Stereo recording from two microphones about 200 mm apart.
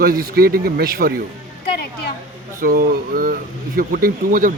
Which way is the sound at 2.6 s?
45° right (ahead or behind).